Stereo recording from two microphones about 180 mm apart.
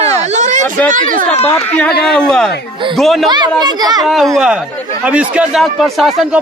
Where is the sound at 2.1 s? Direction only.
5° left (ahead or behind).